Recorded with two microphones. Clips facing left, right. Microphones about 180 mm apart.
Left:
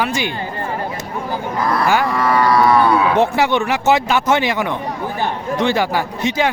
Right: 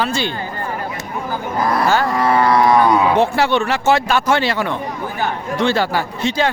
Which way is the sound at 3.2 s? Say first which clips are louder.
Even; 15° left (ahead or behind).